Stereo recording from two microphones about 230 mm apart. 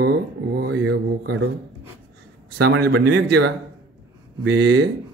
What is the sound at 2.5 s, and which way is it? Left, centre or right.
A man's voice, right.